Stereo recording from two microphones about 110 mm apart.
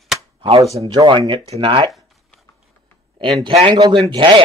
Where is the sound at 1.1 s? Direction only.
45° right (ahead or behind).